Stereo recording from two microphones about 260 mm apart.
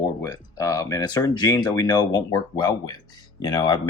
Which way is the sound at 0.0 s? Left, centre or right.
Centre.